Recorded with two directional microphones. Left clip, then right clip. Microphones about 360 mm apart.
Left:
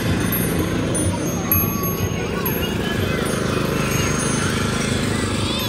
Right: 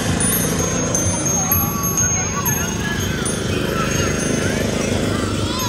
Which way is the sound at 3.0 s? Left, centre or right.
Centre.